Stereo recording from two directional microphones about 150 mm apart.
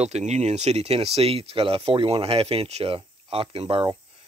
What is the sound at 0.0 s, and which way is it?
Speech, 50° right (ahead or behind).